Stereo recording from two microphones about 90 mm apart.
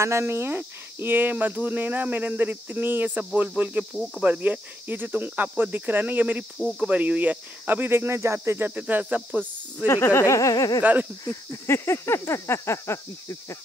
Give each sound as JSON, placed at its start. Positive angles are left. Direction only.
{"t": 0.0, "sound": "speech", "side_deg": -30}
{"t": 3.3, "sound": "cricket", "side_deg": -20}
{"t": 3.9, "sound": "cricket", "side_deg": 0}
{"t": 4.2, "sound": "speech", "side_deg": -15}
{"t": 9.8, "sound": "a sound", "side_deg": 35}
{"t": 10.8, "sound": "cricket", "side_deg": -15}
{"t": 11.2, "sound": "a sound", "side_deg": 35}